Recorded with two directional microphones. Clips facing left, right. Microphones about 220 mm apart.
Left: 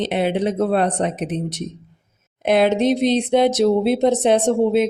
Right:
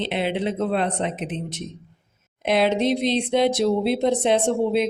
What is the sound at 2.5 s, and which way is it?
Speech, 45° left (ahead or behind).